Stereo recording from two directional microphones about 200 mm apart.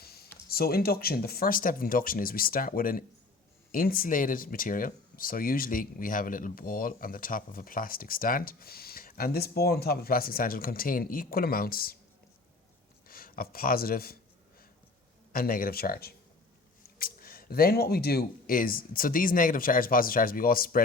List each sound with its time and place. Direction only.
0.0 s a sound: 50° left (ahead or behind)
0.5 s speech: 50° left (ahead or behind)
13.1 s speech: 45° left (ahead or behind)
15.3 s speech: 45° left (ahead or behind)